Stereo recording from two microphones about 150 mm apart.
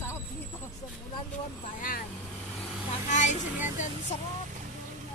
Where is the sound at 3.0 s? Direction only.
55° left (ahead or behind).